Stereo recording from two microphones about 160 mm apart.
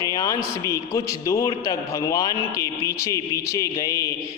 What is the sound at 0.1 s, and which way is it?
A man's voice, 20° left (ahead or behind).